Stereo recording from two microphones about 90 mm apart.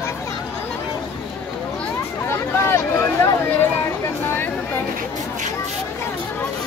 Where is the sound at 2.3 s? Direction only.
30° left (ahead or behind).